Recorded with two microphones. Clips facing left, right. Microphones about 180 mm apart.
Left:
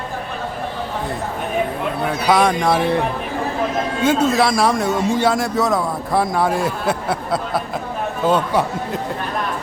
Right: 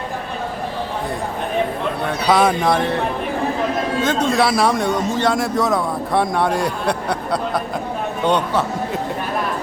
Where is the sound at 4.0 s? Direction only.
10° left (ahead or behind).